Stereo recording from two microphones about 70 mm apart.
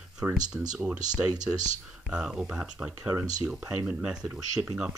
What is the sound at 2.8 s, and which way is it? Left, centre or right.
Speech, right.